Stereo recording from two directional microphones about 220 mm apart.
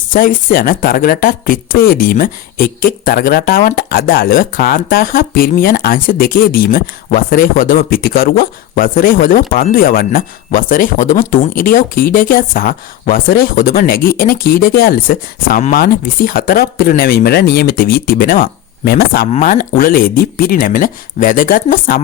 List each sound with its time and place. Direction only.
0.1 s speech: 40° left (ahead or behind)